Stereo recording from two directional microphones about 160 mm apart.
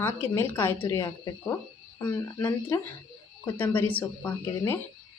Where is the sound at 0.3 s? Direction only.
15° left (ahead or behind).